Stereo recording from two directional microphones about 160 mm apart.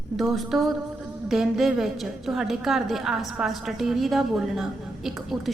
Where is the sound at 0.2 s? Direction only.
Centre (ahead or behind).